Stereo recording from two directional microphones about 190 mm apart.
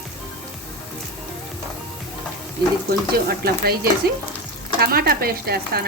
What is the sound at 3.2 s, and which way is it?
Speech, 55° right (ahead or behind).